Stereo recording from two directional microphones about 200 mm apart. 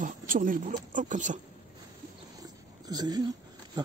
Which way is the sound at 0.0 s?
40° right (ahead or behind).